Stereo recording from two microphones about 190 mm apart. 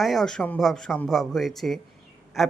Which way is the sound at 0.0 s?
Centre (ahead or behind).